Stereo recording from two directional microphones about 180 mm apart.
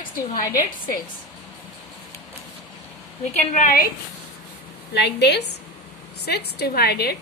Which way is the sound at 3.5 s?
55° left (ahead or behind).